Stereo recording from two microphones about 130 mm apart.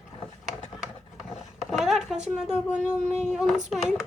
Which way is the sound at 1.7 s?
Centre (ahead or behind).